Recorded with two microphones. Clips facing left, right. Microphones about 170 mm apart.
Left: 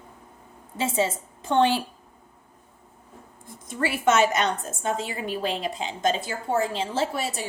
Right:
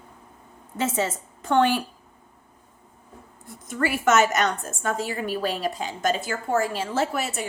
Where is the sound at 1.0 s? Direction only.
25° left (ahead or behind).